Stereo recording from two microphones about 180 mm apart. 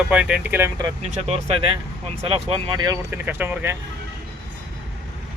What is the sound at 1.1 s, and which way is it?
Speech, 35° right (ahead or behind).